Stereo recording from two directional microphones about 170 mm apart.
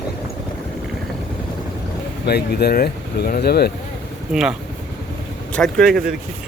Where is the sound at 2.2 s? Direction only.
70° left (ahead or behind).